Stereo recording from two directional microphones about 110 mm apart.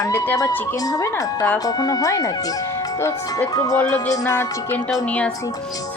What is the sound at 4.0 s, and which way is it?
Music, 30° left (ahead or behind).